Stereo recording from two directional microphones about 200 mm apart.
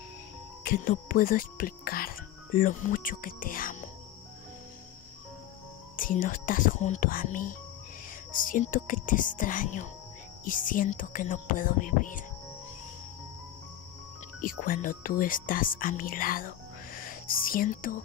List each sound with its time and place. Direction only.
0.7 s speech: 45° left (ahead or behind)
5.9 s speech: 45° left (ahead or behind)
14.4 s speech: 45° left (ahead or behind)